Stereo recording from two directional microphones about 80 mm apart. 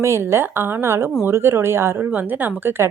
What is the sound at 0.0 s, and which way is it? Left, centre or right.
Speech, right.